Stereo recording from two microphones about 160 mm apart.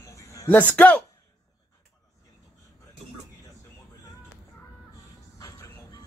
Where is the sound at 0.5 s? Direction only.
10° left (ahead or behind).